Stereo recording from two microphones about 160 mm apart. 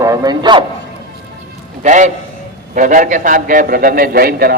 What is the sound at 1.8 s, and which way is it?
A man's voice, 50° right (ahead or behind).